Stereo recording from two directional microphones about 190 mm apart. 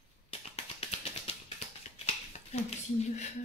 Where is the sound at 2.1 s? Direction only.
35° left (ahead or behind).